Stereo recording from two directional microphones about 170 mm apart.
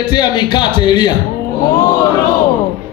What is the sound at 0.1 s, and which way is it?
A man's voice, 25° left (ahead or behind).